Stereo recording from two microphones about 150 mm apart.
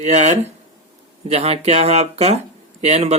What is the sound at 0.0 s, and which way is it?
Speech, 50° right (ahead or behind).